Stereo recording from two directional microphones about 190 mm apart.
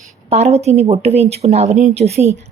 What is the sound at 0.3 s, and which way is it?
Speech, 35° right (ahead or behind).